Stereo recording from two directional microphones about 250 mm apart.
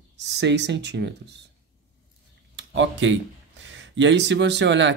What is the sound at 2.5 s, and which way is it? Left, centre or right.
Speech, right.